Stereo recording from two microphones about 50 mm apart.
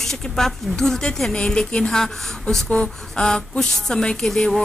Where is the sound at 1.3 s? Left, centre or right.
Centre.